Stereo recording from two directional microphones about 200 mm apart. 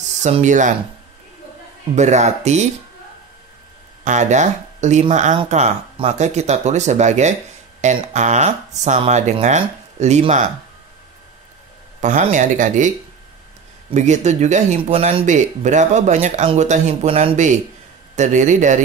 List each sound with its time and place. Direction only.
0.2 s speech: 35° right (ahead or behind)
2.0 s speech: 35° right (ahead or behind)
4.0 s speech: 35° right (ahead or behind)
12.0 s speech: 35° right (ahead or behind)
13.9 s speech: 35° right (ahead or behind)